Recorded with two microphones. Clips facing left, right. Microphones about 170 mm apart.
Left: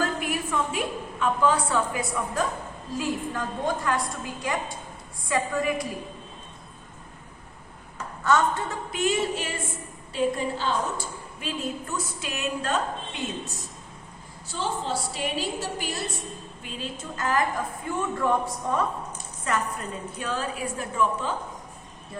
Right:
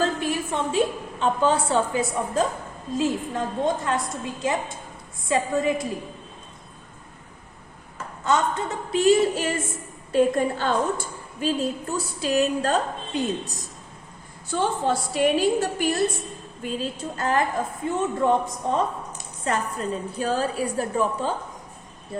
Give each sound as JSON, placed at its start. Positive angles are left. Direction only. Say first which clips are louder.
{"t": 0.0, "sound": "a woman's voice", "louder": "right 3 dB", "side_deg": -30}
{"t": 8.2, "sound": "speech", "louder": "even", "side_deg": -20}
{"t": 8.9, "sound": "a woman's voice", "louder": "right 8 dB", "side_deg": -35}
{"t": 11.3, "sound": "a woman's voice", "louder": "right 7 dB", "side_deg": -35}
{"t": 14.4, "sound": "a woman's voice", "louder": "right 6 dB", "side_deg": -55}
{"t": 16.6, "sound": "a woman's voice", "louder": "right 7 dB", "side_deg": -40}